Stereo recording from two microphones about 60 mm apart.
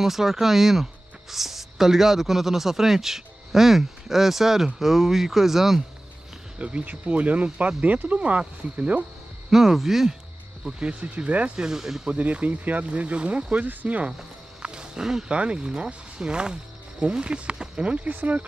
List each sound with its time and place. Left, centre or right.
0.0 s speech: centre
6.6 s speech: right
9.5 s speech: centre
10.8 s speech: centre
12.1 s speech: right
14.1 s music: centre
15.3 s speech: centre